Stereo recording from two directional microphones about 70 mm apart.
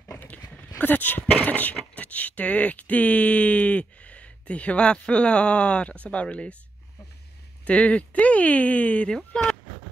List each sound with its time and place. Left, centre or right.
0.7 s speech: left
7.6 s speech: left